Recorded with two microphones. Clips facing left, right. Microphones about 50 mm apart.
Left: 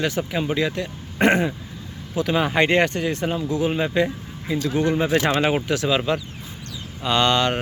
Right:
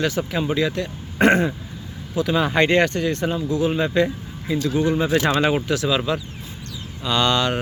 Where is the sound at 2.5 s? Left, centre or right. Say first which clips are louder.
Right 1 dB; centre.